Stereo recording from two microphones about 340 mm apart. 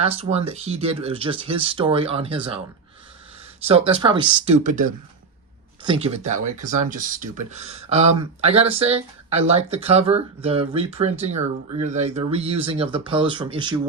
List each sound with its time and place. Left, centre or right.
0.0 s speech: centre
3.7 s speech: centre